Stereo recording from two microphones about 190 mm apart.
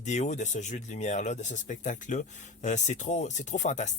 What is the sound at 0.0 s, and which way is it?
Speech, 40° left (ahead or behind).